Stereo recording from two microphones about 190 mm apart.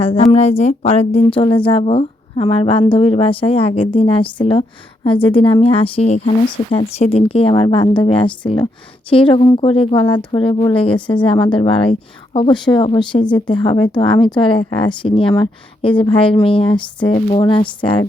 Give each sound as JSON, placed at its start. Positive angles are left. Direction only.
{"t": 0.0, "sound": "speech", "side_deg": 30}